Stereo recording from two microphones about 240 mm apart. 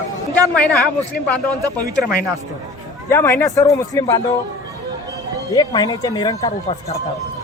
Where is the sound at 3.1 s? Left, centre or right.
Centre.